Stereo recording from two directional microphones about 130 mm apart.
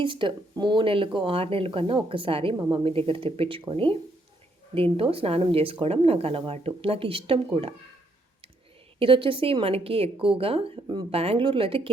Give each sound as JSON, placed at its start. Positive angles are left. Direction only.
{"t": 0.0, "sound": "speech", "side_deg": -40}
{"t": 9.0, "sound": "speech", "side_deg": -45}